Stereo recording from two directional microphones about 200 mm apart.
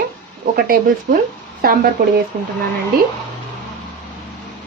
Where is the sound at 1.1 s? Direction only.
45° right (ahead or behind).